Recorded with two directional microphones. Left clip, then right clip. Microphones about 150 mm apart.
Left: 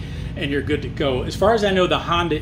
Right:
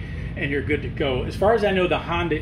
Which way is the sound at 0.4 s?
10° left (ahead or behind).